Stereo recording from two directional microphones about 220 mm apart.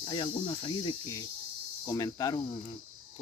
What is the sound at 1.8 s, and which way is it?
Speech, 15° left (ahead or behind).